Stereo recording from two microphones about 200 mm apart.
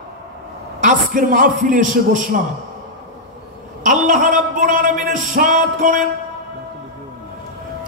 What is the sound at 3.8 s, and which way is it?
A man's voice, 40° right (ahead or behind).